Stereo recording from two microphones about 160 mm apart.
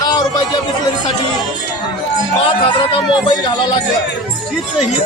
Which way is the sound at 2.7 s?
30° left (ahead or behind).